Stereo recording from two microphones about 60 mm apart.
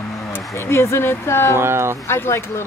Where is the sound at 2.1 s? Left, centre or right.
Left.